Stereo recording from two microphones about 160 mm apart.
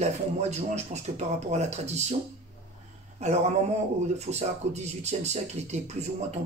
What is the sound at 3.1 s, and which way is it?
Speech, 45° right (ahead or behind).